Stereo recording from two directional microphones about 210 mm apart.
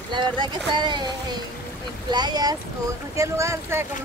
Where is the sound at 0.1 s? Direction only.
20° right (ahead or behind).